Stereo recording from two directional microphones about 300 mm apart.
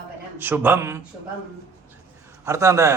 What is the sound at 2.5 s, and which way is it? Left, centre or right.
Speech, centre.